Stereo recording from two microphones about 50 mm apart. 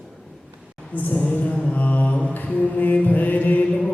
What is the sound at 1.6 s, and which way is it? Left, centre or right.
Mantra, left.